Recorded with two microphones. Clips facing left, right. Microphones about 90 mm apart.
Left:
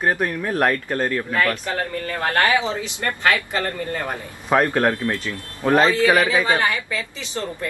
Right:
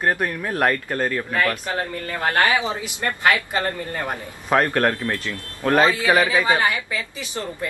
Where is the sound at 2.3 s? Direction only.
15° right (ahead or behind).